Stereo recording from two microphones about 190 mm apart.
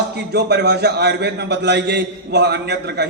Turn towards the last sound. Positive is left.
turn(degrees=-60)  # may be behind; listen again after turning